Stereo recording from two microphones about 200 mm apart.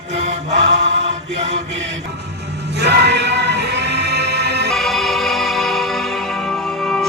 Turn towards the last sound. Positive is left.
turn(degrees=5)  # may be behind; listen again after turning